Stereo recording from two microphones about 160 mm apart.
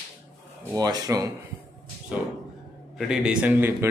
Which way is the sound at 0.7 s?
25° right (ahead or behind).